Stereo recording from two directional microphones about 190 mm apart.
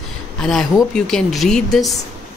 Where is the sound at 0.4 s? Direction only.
Centre (ahead or behind).